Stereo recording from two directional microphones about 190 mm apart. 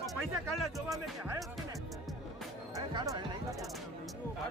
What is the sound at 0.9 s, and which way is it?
Speech, centre (ahead or behind).